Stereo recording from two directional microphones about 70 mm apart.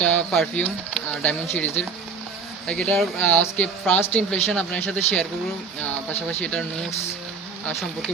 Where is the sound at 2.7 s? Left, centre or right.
Centre.